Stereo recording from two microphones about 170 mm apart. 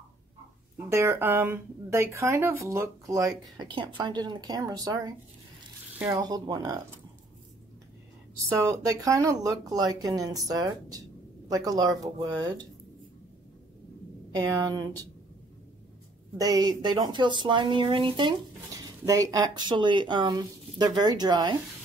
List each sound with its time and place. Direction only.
0.7 s speech: 15° right (ahead or behind)
3.3 s speech: 25° right (ahead or behind)
6.2 s speech: 25° right (ahead or behind)
8.8 s speech: 20° right (ahead or behind)
14.3 s speech: 25° right (ahead or behind)
16.3 s speech: 20° right (ahead or behind)